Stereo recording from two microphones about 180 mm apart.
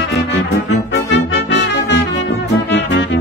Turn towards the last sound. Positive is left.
turn(degrees=75)  # may be behind; listen again after turning